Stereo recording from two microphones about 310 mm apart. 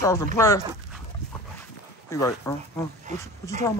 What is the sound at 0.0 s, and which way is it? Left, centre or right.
Speech, centre.